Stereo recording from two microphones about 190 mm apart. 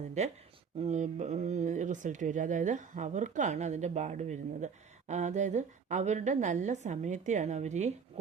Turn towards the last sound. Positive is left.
turn(degrees=-35)  # may be behind; listen again after turning